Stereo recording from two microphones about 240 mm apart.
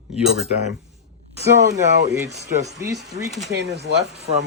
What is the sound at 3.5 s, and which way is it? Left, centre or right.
Speech, right.